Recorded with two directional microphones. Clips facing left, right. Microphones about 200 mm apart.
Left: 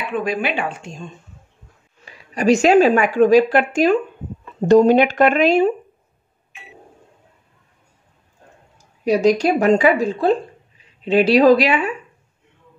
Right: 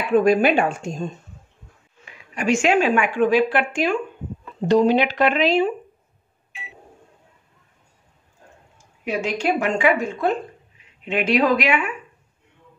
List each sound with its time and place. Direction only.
0.1 s speech: 45° right (ahead or behind)
2.0 s a woman's voice: 35° left (ahead or behind)
8.7 s a woman's voice: 35° left (ahead or behind)